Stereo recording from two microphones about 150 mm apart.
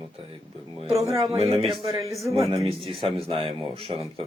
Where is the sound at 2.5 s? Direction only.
35° right (ahead or behind).